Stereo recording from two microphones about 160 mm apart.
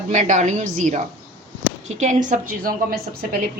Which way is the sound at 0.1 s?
50° right (ahead or behind).